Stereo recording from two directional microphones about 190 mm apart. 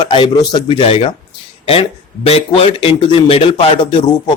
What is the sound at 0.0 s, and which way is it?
Speech, 25° left (ahead or behind).